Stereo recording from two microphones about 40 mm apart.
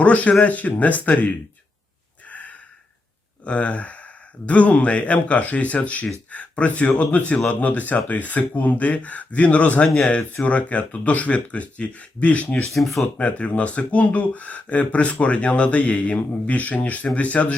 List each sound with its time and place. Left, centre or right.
0.0 s speech: left
2.2 s a sound: left
3.4 s speech: left
9.8 s speech: centre
10.4 s speech: left
12.7 s speech: centre
13.1 s speech: left